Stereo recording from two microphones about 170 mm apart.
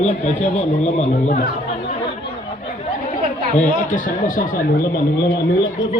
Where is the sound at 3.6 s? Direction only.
50° left (ahead or behind).